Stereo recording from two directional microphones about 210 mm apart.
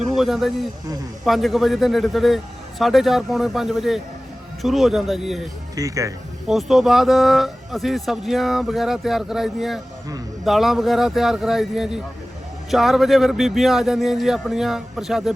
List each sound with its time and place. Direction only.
0.1 s a man's voice: centre (ahead or behind)
5.7 s speech: 15° right (ahead or behind)
6.5 s speech: centre (ahead or behind)